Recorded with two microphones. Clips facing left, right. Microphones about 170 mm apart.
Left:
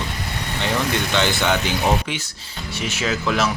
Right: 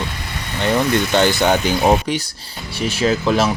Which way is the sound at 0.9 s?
45° right (ahead or behind).